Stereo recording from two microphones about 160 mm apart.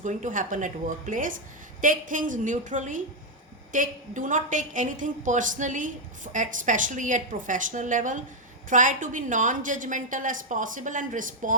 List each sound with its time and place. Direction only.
0.0 s a woman's voice: 50° right (ahead or behind)